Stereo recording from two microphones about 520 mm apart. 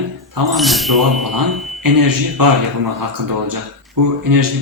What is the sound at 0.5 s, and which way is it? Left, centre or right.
Speech, centre.